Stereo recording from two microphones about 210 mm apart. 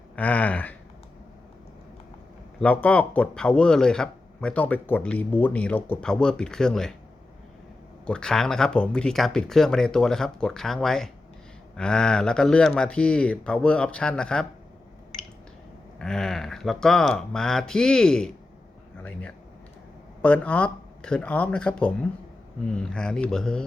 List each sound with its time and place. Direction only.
0.2 s a sound: 5° left (ahead or behind)
2.6 s speech: 5° left (ahead or behind)
8.0 s speech: 5° left (ahead or behind)
16.0 s speech: 5° left (ahead or behind)
20.2 s speech: 5° left (ahead or behind)